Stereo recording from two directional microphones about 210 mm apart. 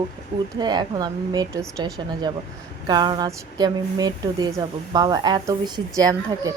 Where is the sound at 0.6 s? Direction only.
20° right (ahead or behind).